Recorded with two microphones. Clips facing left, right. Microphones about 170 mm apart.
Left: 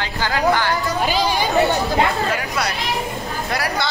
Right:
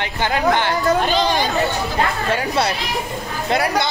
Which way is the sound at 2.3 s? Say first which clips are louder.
Right 4 dB; 30° right (ahead or behind).